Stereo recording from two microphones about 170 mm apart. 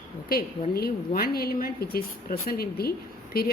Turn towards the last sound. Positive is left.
turn(degrees=65)  # may be behind; listen again after turning